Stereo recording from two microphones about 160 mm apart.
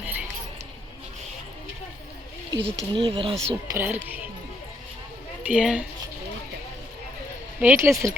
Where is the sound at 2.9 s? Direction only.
30° right (ahead or behind).